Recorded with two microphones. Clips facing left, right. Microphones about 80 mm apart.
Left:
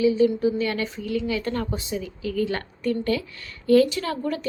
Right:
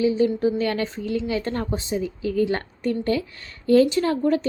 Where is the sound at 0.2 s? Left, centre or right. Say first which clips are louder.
Even; right.